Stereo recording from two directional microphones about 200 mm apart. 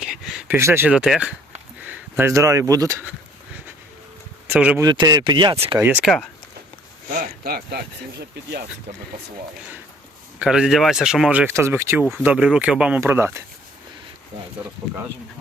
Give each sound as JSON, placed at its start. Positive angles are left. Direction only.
{"t": 0.0, "sound": "speech", "side_deg": 0}
{"t": 4.4, "sound": "speech", "side_deg": -5}
{"t": 4.8, "sound": "speech", "side_deg": -20}
{"t": 5.7, "sound": "speech", "side_deg": -10}
{"t": 7.4, "sound": "speech", "side_deg": -50}
{"t": 10.4, "sound": "speech", "side_deg": -5}